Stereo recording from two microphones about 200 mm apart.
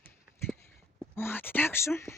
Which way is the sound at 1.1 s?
10° left (ahead or behind).